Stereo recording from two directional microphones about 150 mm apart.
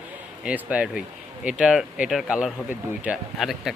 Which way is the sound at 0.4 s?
10° right (ahead or behind).